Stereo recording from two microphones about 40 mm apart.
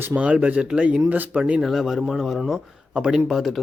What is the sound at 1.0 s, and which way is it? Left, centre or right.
Speech, right.